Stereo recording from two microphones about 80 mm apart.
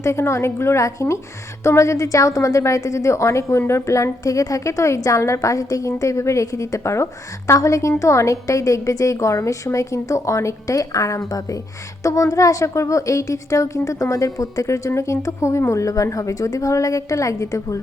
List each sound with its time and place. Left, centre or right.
0.0 s a woman's voice: left